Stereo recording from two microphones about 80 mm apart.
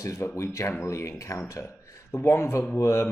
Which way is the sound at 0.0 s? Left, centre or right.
Left.